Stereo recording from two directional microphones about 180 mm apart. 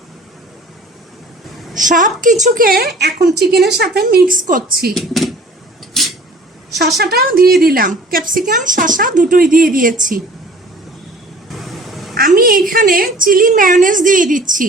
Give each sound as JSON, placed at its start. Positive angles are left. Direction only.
{"t": 1.7, "sound": "a woman's voice", "side_deg": -45}
{"t": 4.9, "sound": "speech", "side_deg": 0}
{"t": 5.9, "sound": "a sound", "side_deg": 0}
{"t": 6.7, "sound": "a woman's voice", "side_deg": -65}
{"t": 11.5, "sound": "vehicle", "side_deg": 0}
{"t": 12.1, "sound": "a woman's voice", "side_deg": -50}